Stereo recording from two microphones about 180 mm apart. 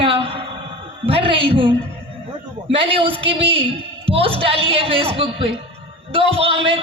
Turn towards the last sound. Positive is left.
turn(degrees=-35)  # may be behind; listen again after turning